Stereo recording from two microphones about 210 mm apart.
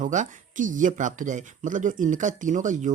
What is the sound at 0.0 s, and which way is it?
Speech, 35° right (ahead or behind).